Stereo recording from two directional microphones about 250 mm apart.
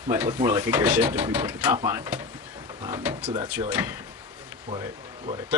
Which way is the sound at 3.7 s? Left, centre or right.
Centre.